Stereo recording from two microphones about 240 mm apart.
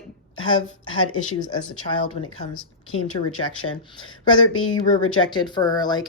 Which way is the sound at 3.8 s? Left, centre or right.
Centre.